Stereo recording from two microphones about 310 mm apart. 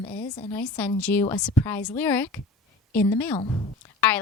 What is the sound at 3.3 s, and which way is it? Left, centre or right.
Speech, centre.